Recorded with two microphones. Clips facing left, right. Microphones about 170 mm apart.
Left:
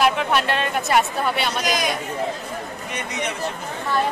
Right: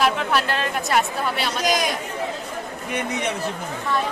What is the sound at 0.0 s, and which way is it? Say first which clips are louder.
A woman's voice: left 1 dB; centre (ahead or behind).